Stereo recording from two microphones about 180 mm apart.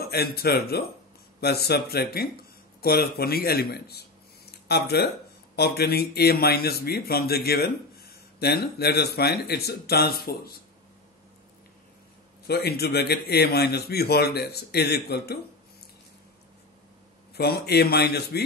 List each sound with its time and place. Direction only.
0.0 s a man's voice: 60° left (ahead or behind)
12.4 s a man's voice: 60° left (ahead or behind)
17.4 s a man's voice: 65° left (ahead or behind)